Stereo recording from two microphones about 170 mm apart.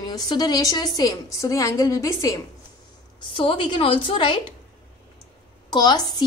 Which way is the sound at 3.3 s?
30° left (ahead or behind).